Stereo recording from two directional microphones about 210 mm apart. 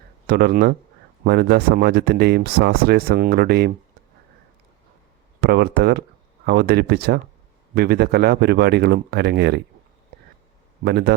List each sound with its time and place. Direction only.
0.3 s speech: 45° right (ahead or behind)
5.4 s speech: 50° right (ahead or behind)
10.8 s speech: 50° right (ahead or behind)